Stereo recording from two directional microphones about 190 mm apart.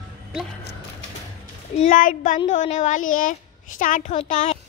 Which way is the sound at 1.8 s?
45° left (ahead or behind).